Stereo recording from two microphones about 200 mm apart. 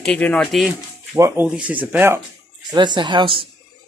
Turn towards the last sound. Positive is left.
turn(degrees=-25)  # may be behind; listen again after turning